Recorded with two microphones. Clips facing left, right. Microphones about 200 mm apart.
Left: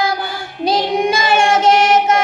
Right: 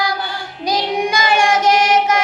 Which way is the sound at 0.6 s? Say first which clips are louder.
Left 3 dB; 25° left (ahead or behind).